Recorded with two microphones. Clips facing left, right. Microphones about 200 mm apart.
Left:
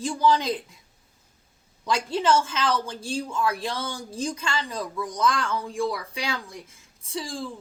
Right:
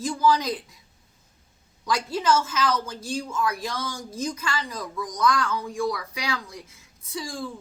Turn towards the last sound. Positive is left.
turn(degrees=30)  # may be behind; listen again after turning